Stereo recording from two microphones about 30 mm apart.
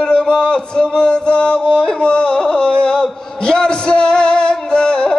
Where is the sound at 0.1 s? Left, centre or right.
Left.